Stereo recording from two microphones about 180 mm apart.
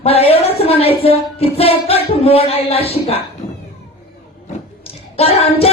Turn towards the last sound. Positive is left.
turn(degrees=35)  # may be behind; listen again after turning